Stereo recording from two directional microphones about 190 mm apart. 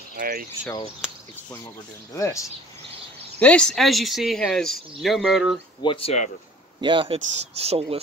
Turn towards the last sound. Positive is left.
turn(degrees=-30)  # may be behind; listen again after turning